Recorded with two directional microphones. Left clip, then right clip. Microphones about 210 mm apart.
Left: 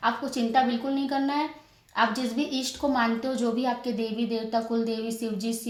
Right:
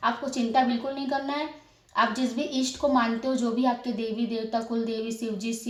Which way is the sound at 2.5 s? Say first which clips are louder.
Right 2 dB; 30° left (ahead or behind).